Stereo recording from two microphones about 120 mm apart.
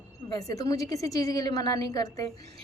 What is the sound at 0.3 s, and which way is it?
A woman's voice, 30° left (ahead or behind).